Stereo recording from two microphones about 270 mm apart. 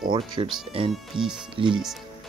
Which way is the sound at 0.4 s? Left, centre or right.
Centre.